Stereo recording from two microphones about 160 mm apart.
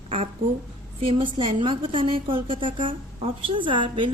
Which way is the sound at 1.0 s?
35° right (ahead or behind).